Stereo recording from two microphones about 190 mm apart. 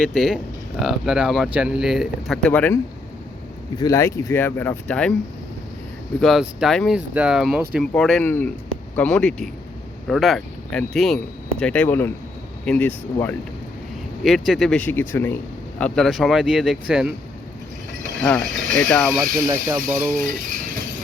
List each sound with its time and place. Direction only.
0.0 s speech: centre (ahead or behind)
3.8 s speech: 15° left (ahead or behind)
6.1 s speech: centre (ahead or behind)
14.3 s speech: centre (ahead or behind)
18.2 s speech: 5° left (ahead or behind)
19.5 s speech: 20° right (ahead or behind)
20.1 s rattle: 45° right (ahead or behind)